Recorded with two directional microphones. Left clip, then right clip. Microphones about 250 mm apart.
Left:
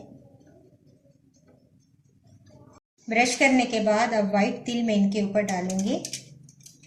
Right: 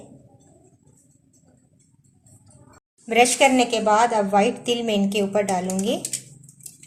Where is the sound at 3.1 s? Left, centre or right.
Right.